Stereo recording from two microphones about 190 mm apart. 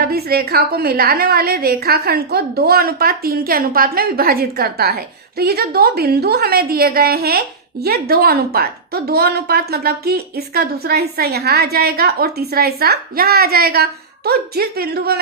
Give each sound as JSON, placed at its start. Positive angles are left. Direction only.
{"t": 0.0, "sound": "a woman's voice", "side_deg": -55}